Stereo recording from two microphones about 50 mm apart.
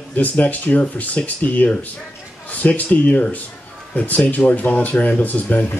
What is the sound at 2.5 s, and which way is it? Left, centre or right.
A man's voice, left.